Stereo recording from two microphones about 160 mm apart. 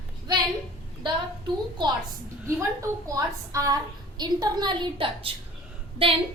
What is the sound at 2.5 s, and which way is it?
A woman's voice, 15° right (ahead or behind).